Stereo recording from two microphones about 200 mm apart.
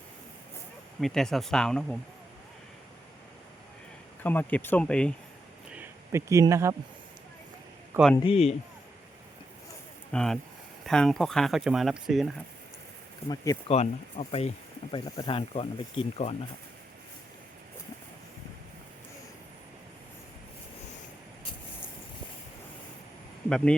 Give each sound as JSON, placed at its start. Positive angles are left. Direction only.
{"t": 1.0, "sound": "speech", "side_deg": 0}
{"t": 4.2, "sound": "speech", "side_deg": 10}
{"t": 5.7, "sound": "speech", "side_deg": -10}
{"t": 8.2, "sound": "speech", "side_deg": 30}
{"t": 10.1, "sound": "speech", "side_deg": 5}
{"t": 13.3, "sound": "speech", "side_deg": 15}
{"t": 13.7, "sound": "speech", "side_deg": 30}
{"t": 23.5, "sound": "speech", "side_deg": 5}